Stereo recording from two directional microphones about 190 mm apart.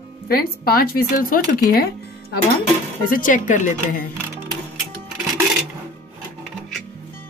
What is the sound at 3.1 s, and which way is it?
Speech, 45° left (ahead or behind).